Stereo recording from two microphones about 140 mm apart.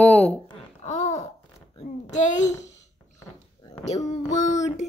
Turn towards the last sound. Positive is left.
turn(degrees=55)  # may be behind; listen again after turning